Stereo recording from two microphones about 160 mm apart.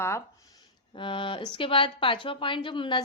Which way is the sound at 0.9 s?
30° left (ahead or behind).